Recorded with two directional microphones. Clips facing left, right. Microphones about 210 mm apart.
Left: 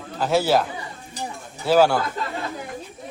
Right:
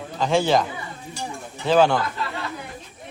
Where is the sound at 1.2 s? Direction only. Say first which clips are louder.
Even; 5° left (ahead or behind).